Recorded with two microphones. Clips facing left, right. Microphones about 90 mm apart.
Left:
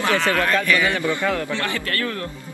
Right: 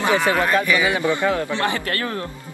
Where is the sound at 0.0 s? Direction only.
15° right (ahead or behind).